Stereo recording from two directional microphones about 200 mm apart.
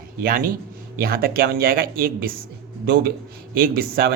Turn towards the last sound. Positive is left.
turn(degrees=-50)  # may be behind; listen again after turning